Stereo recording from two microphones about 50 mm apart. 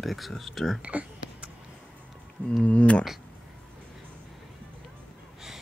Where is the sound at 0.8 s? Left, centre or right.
Right.